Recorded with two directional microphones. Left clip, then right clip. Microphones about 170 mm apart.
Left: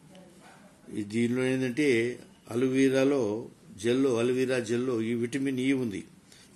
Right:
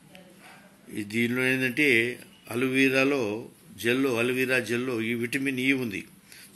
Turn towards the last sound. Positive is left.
turn(degrees=15)  # may be behind; listen again after turning